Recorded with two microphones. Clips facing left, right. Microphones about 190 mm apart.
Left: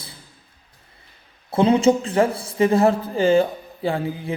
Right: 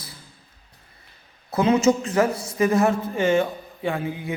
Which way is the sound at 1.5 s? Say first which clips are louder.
Left 2 dB; 30° left (ahead or behind).